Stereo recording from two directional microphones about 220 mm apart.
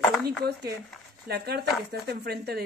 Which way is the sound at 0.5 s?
45° right (ahead or behind).